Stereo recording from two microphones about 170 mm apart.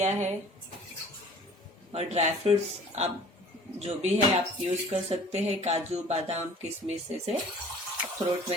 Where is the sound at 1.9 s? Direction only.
40° right (ahead or behind).